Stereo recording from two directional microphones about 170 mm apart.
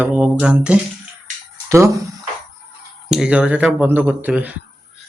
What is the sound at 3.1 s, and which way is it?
Speech, 5° right (ahead or behind).